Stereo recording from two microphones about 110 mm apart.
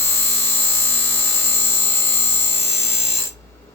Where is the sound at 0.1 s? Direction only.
20° left (ahead or behind).